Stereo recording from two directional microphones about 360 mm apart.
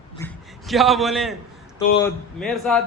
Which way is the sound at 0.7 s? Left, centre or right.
Centre.